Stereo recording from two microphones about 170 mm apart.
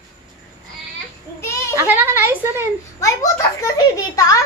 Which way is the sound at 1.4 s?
15° left (ahead or behind).